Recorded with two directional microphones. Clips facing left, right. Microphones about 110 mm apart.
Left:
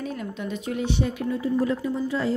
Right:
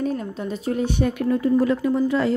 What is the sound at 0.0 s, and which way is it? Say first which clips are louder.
Speech: right 6 dB; 35° right (ahead or behind).